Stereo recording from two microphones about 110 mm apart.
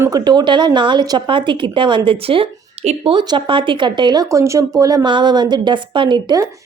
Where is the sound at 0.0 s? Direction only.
35° right (ahead or behind); by 3.2 s 60° right (ahead or behind).